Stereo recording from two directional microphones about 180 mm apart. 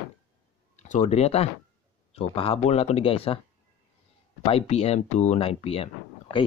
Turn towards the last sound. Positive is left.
turn(degrees=35)  # may be behind; listen again after turning